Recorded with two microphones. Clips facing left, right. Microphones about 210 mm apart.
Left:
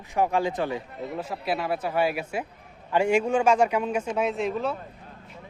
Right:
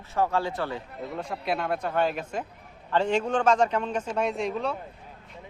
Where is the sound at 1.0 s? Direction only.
5° left (ahead or behind).